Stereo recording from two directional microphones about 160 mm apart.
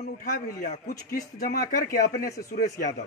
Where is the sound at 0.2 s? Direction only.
60° left (ahead or behind).